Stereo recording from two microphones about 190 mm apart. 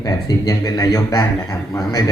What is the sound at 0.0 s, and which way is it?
A man's voice, 20° left (ahead or behind).